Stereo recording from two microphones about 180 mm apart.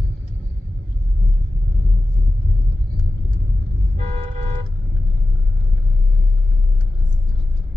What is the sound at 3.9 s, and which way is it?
Vehicle, 35° right (ahead or behind).